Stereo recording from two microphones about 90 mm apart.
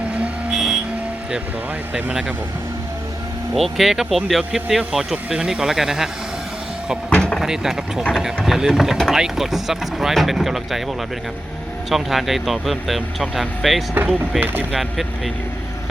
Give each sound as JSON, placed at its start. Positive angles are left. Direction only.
{"t": 0.5, "sound": "vehicle", "side_deg": 0}
{"t": 3.5, "sound": "speech", "side_deg": 0}
{"t": 7.1, "sound": "a sound", "side_deg": 10}
{"t": 7.4, "sound": "speech", "side_deg": -5}
{"t": 11.9, "sound": "speech", "side_deg": 0}
{"t": 14.3, "sound": "speech", "side_deg": -20}
{"t": 14.7, "sound": "speech", "side_deg": 0}